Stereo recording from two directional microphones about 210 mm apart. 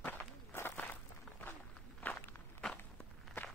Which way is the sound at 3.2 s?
Centre (ahead or behind).